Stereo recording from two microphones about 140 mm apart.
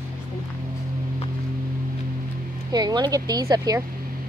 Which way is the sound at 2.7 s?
30° right (ahead or behind).